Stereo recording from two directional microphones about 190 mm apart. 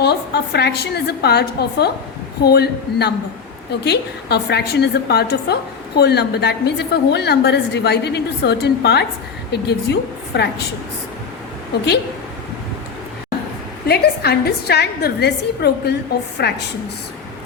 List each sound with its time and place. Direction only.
0.0 s a woman's voice: 60° left (ahead or behind)
13.8 s a woman's voice: 55° left (ahead or behind)